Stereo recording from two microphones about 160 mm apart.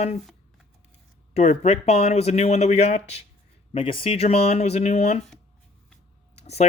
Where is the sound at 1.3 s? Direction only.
40° left (ahead or behind).